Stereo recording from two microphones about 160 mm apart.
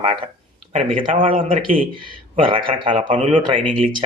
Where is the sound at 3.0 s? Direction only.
50° right (ahead or behind).